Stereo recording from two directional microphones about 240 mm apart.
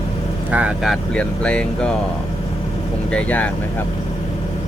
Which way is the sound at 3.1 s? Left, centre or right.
Centre.